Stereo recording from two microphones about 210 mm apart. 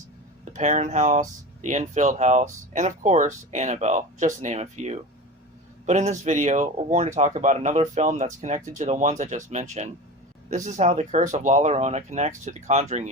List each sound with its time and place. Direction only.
0.5 s speech: 35° right (ahead or behind)